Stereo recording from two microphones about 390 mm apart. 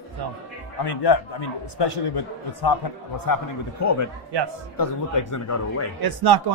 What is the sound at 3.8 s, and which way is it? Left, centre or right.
Speech, left.